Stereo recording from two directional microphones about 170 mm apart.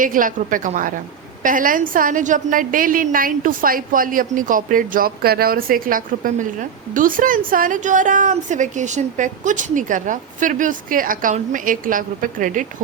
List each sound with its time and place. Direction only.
0.0 s a woman's voice: 55° right (ahead or behind)